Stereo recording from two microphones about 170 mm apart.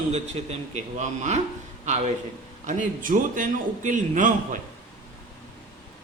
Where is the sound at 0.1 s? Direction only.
40° right (ahead or behind).